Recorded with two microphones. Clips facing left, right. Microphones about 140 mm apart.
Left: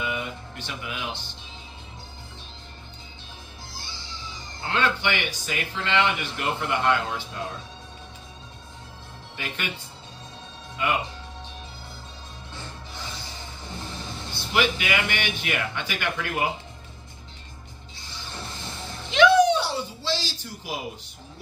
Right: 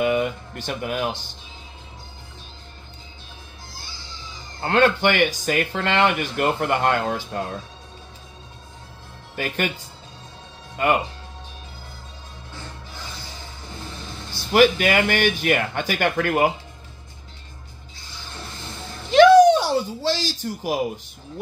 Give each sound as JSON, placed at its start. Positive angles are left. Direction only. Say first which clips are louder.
{"t": 0.0, "sound": "speech", "louder": "right 10 dB", "side_deg": -55}
{"t": 4.6, "sound": "speech", "louder": "right 7 dB", "side_deg": -50}
{"t": 9.3, "sound": "speech", "louder": "right 9 dB", "side_deg": -45}
{"t": 10.8, "sound": "speech", "louder": "right 6 dB", "side_deg": -45}
{"t": 14.5, "sound": "speech", "louder": "right 8 dB", "side_deg": -45}
{"t": 19.0, "sound": "a sound", "louder": "right 6 dB", "side_deg": -45}